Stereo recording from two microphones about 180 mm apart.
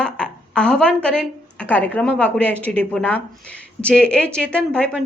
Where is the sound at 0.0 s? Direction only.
5° left (ahead or behind).